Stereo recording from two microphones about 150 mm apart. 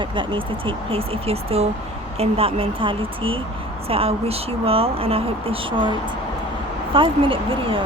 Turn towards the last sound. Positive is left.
turn(degrees=-35)  # may be behind; listen again after turning